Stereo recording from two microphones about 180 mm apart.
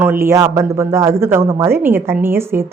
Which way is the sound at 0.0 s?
15° right (ahead or behind).